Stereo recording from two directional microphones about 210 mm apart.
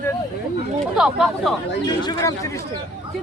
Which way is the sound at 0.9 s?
Centre (ahead or behind).